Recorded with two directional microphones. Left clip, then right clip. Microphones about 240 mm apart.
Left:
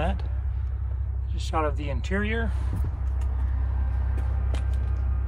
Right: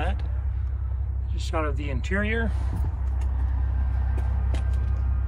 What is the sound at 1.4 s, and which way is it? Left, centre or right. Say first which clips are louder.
Speech: left 2 dB; centre.